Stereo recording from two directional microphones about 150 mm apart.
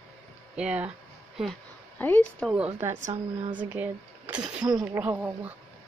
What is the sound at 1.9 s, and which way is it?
Speech, 10° left (ahead or behind).